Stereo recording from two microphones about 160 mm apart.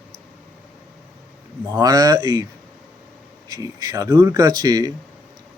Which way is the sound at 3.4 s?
20° right (ahead or behind).